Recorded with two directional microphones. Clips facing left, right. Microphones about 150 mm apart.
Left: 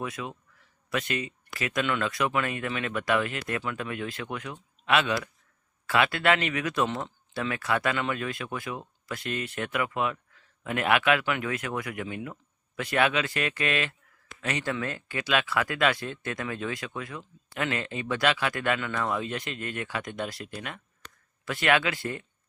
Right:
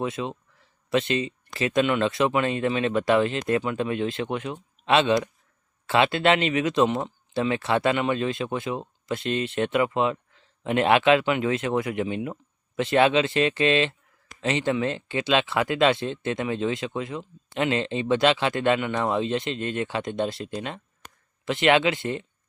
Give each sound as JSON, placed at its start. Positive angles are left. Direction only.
{"t": 0.0, "sound": "speech", "side_deg": -25}